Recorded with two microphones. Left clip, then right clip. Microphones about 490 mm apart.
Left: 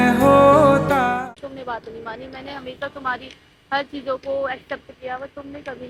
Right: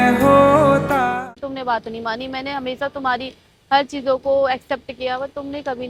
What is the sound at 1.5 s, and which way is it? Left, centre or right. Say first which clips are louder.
A woman's voice: right 8 dB; right.